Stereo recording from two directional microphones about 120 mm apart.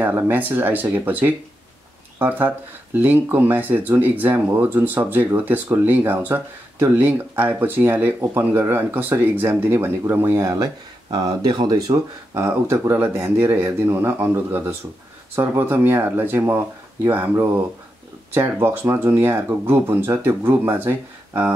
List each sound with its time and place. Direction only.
0.0 s speech: 15° right (ahead or behind)